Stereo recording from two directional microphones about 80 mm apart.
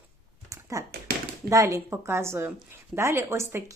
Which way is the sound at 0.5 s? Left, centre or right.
Right.